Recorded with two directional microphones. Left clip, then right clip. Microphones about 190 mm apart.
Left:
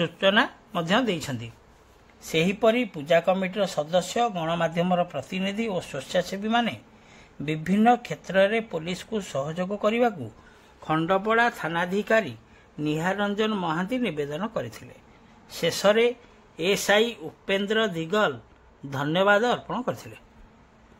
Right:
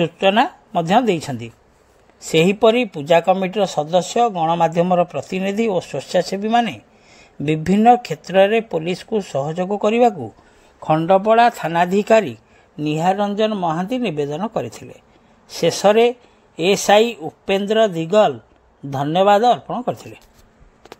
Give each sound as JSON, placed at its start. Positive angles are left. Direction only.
{"t": 0.0, "sound": "a man's voice", "side_deg": -25}